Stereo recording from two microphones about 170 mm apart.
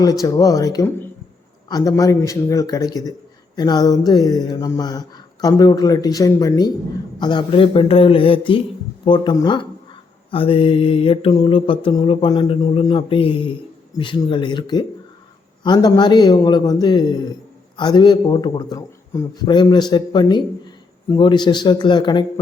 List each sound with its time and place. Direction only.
0.0 s a man's voice: 20° left (ahead or behind)